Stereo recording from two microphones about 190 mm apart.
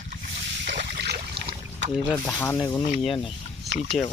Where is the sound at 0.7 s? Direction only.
60° right (ahead or behind).